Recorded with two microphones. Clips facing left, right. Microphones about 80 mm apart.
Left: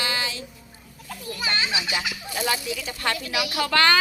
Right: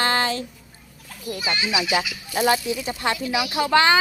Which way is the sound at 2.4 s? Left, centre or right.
Right.